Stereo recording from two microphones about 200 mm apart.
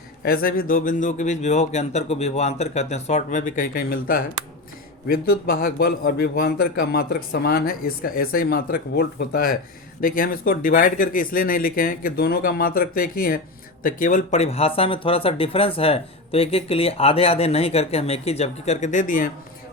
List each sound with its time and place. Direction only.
0.3 s a man's voice: 45° left (ahead or behind)